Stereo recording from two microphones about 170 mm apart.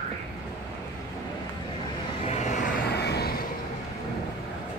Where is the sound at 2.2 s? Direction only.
45° left (ahead or behind).